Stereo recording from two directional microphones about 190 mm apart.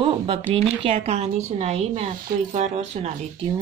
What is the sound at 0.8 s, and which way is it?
A woman's voice, 30° right (ahead or behind).